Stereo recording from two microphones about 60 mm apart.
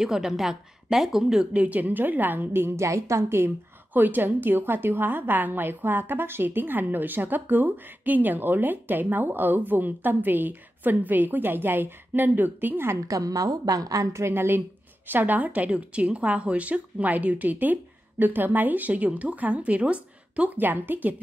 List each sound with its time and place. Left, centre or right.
0.0 s a woman's voice: centre
1.5 s a woman's voice: right
2.8 s a woman's voice: right
3.9 s a woman's voice: right
13.1 s a woman's voice: right
14.1 s a woman's voice: right